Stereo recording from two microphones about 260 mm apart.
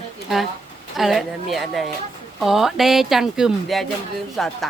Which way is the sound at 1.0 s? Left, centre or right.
Centre.